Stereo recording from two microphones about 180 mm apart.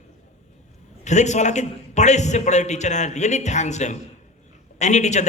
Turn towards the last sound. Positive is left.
turn(degrees=40)  # may be behind; listen again after turning